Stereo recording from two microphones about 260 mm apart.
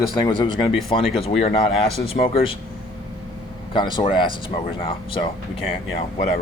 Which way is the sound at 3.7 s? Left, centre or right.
Centre.